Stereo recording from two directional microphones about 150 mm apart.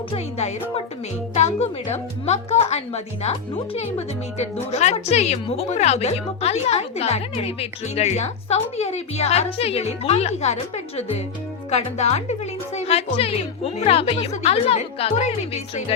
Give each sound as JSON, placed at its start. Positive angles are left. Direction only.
{"t": 0.1, "sound": "a woman's voice", "side_deg": 45}